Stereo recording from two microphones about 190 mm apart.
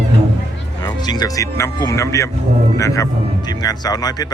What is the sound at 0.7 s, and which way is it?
Speech, 20° left (ahead or behind).